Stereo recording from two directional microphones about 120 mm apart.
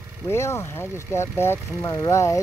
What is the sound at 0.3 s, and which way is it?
Speech, 20° left (ahead or behind).